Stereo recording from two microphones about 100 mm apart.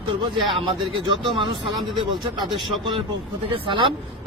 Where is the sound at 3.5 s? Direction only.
60° right (ahead or behind).